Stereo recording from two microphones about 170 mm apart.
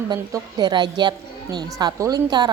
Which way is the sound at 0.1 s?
25° right (ahead or behind).